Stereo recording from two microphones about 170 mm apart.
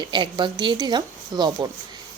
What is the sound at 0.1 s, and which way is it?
Speech, 25° right (ahead or behind).